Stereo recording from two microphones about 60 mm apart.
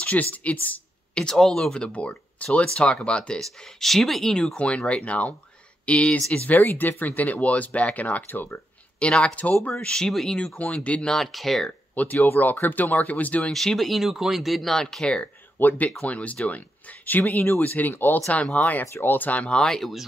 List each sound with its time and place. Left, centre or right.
0.0 s speech: left
1.3 s speech: centre
1.9 s speech: left
3.3 s speech: centre
4.6 s speech: left
9.0 s speech: centre
11.1 s speech: centre
11.9 s speech: left
13.4 s speech: centre
15.6 s speech: left; by 19.9 s centre